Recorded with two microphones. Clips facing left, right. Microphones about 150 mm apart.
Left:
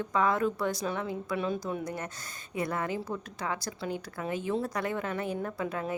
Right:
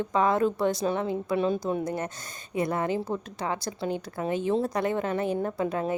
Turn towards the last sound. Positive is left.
turn(degrees=-30)  # may be behind; listen again after turning